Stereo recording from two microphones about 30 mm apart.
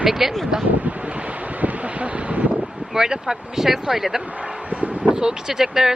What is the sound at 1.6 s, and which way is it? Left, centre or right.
Wind, right.